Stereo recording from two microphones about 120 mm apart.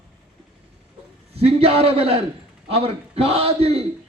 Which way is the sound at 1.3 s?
55° right (ahead or behind).